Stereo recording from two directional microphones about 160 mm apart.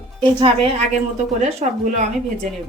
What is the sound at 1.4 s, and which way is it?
Speech, 45° right (ahead or behind).